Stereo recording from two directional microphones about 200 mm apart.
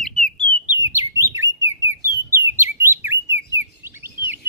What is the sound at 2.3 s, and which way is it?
Chirp, 15° right (ahead or behind).